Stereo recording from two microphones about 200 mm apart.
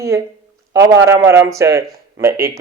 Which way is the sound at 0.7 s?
15° right (ahead or behind).